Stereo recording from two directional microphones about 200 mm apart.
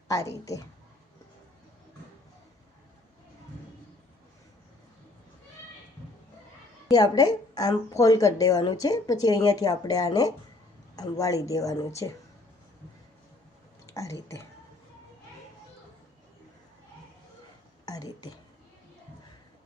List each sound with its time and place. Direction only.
0.1 s a woman's voice: 15° left (ahead or behind)
6.9 s a woman's voice: 20° left (ahead or behind)
13.8 s speech: 15° left (ahead or behind)
17.8 s a woman's voice: 20° left (ahead or behind)